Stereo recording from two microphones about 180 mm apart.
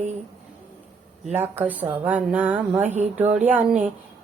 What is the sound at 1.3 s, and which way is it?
Speech, 10° right (ahead or behind).